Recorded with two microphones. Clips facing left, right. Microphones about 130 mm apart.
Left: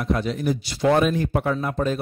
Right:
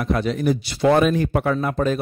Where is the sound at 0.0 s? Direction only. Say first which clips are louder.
Right 3 dB; 80° right.